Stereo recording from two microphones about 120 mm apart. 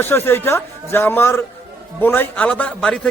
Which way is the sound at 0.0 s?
20° left (ahead or behind).